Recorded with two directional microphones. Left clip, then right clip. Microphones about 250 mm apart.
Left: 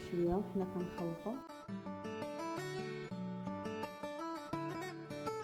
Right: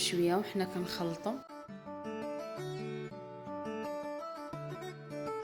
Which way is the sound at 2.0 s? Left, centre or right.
Centre.